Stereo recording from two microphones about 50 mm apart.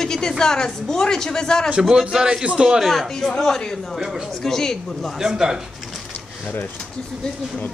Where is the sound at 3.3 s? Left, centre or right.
Centre.